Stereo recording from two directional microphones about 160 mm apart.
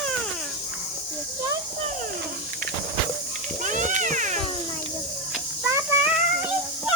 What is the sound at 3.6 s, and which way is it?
Cat, 50° right (ahead or behind).